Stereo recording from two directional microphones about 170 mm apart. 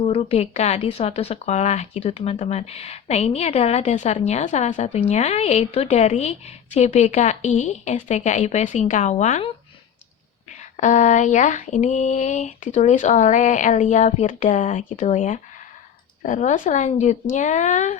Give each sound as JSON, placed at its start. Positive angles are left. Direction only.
{"t": 0.0, "sound": "speech", "side_deg": 35}
{"t": 10.6, "sound": "speech", "side_deg": 45}